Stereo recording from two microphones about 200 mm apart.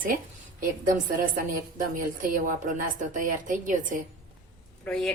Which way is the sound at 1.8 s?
40° right (ahead or behind).